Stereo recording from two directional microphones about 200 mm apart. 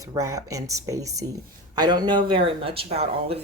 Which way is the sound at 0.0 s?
15° right (ahead or behind).